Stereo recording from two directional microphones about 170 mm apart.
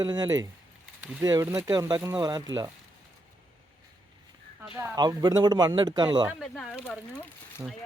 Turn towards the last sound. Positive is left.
turn(degrees=5)  # may be behind; listen again after turning